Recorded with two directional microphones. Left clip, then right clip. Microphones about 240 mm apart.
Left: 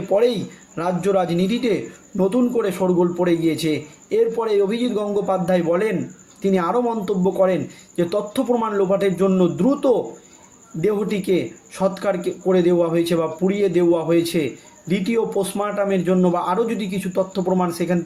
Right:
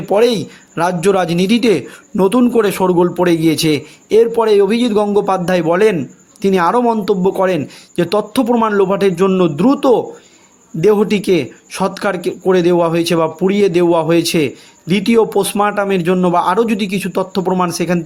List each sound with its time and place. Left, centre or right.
0.1 s a man's voice: right